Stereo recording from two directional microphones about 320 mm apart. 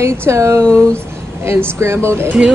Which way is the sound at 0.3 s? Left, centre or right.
Centre.